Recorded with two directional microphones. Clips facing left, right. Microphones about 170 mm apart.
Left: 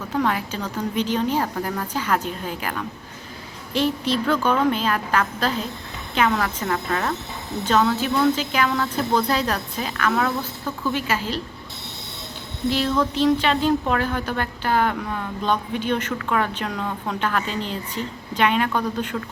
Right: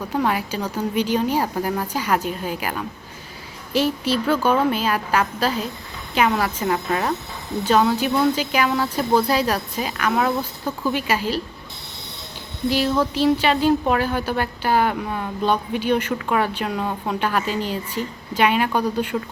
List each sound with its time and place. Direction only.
0.1 s speech: 10° right (ahead or behind)
12.7 s speech: 10° right (ahead or behind)
19.1 s speech: 20° right (ahead or behind)